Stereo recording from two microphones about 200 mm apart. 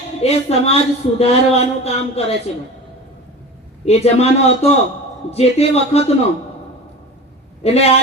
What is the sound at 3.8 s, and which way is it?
Music, 30° left (ahead or behind).